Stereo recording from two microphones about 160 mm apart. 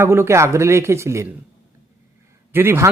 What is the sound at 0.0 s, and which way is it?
Speech, 15° right (ahead or behind).